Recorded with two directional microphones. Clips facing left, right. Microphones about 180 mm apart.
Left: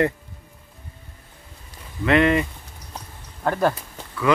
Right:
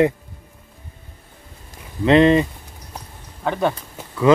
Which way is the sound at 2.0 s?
25° right (ahead or behind).